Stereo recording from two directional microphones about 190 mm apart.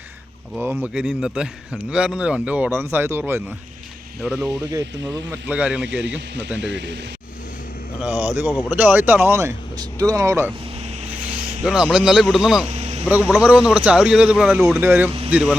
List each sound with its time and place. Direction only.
0.5 s speech: 10° right (ahead or behind)
6.0 s speech: 75° right (ahead or behind)
8.7 s speech: 10° right (ahead or behind)
11.2 s vehicle: 10° right (ahead or behind)
11.6 s speech: 5° right (ahead or behind)
12.6 s vehicle: 35° right (ahead or behind)
13.1 s speech: 10° right (ahead or behind)